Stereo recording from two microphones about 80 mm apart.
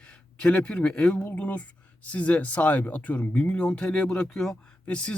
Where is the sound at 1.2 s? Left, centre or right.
Left.